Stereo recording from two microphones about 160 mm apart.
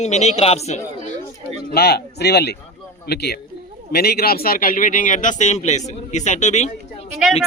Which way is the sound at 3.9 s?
75° left (ahead or behind).